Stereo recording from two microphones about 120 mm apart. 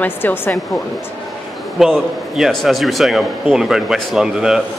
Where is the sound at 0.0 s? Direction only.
15° left (ahead or behind).